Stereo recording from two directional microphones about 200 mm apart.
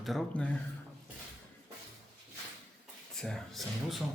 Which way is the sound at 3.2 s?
Centre (ahead or behind).